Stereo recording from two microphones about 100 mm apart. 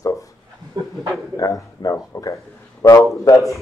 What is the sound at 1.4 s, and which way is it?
Speech, 35° left (ahead or behind).